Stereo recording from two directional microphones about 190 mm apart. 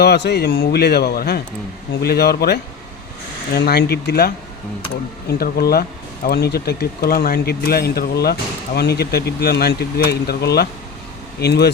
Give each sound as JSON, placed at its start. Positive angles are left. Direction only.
{"t": 0.0, "sound": "speech", "side_deg": 60}
{"t": 5.4, "sound": "speech", "side_deg": 55}